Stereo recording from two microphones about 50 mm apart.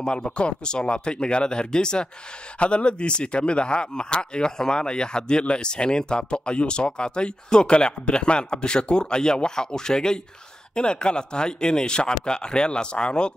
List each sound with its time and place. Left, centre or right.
0.0 s speech: centre